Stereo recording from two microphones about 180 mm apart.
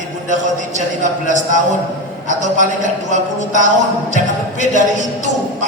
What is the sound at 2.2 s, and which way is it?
Speech, 45° right (ahead or behind).